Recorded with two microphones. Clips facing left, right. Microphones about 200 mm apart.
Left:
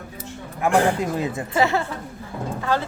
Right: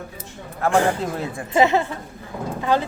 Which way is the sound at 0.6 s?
15° left (ahead or behind).